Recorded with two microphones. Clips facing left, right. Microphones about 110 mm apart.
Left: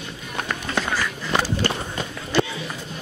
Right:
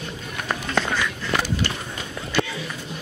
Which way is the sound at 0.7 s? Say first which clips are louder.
Right 1 dB; 5° left (ahead or behind).